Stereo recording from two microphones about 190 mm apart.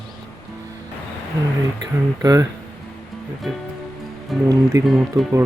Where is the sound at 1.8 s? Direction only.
20° right (ahead or behind).